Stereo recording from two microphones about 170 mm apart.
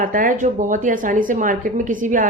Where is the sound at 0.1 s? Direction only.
50° right (ahead or behind).